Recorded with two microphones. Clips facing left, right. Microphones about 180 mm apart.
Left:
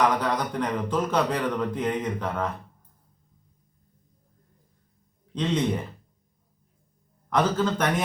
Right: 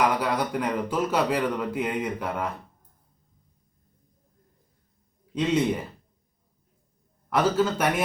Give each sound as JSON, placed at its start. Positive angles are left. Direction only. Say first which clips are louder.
{"t": 0.0, "sound": "a man's voice", "louder": "even", "side_deg": -10}
{"t": 5.3, "sound": "a man's voice", "louder": "right 2 dB", "side_deg": -10}
{"t": 7.3, "sound": "a man's voice", "louder": "right 1 dB", "side_deg": -5}